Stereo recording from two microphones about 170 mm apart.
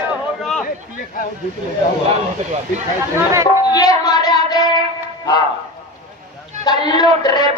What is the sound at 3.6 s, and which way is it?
Music, 20° left (ahead or behind).